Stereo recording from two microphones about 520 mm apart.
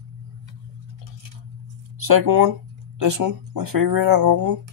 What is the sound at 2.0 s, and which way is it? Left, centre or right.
Speech, right.